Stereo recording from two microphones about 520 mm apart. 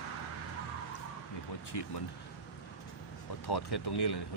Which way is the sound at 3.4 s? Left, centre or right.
Left.